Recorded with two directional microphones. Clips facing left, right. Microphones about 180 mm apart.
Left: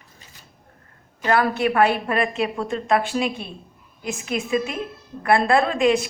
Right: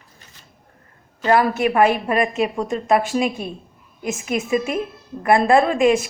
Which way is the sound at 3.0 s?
45° right (ahead or behind).